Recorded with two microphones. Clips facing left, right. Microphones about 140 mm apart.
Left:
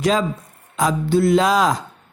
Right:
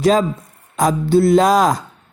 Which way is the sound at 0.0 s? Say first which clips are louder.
Right 4 dB; 40° right (ahead or behind).